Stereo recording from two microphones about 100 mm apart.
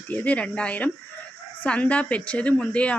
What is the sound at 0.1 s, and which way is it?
A woman's voice, 15° left (ahead or behind).